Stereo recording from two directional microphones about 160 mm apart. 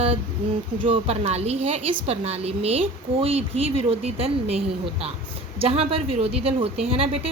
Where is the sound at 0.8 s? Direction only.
35° right (ahead or behind).